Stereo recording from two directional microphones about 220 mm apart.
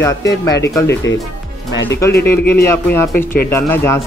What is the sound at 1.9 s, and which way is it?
Speech, 10° left (ahead or behind).